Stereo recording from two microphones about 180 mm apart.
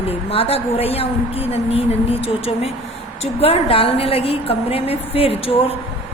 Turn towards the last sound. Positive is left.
turn(degrees=30)  # may be behind; listen again after turning